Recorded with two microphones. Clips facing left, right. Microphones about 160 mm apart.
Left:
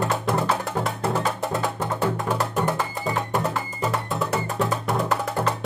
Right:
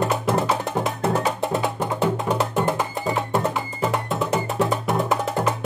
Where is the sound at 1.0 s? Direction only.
20° right (ahead or behind).